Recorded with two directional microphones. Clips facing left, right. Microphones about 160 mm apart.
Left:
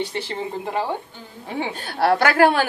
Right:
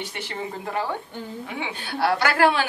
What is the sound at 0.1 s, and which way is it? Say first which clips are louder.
Speech: left 4 dB; 25° left (ahead or behind).